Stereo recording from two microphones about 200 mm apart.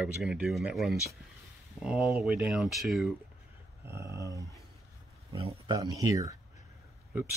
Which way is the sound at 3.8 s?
15° right (ahead or behind).